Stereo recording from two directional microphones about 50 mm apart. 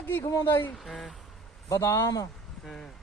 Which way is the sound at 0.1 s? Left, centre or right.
Left.